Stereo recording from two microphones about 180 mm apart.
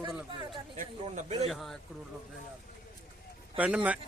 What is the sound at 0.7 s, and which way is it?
Speech, 40° right (ahead or behind).